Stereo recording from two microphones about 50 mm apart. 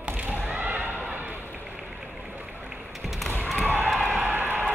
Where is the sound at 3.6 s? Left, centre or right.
Right.